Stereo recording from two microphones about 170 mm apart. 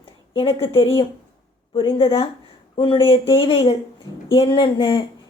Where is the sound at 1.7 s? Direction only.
30° left (ahead or behind).